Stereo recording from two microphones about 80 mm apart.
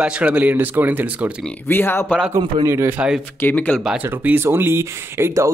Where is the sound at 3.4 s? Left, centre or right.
Centre.